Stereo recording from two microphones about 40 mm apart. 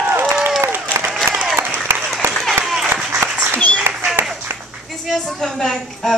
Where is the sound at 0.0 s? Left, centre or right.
Right.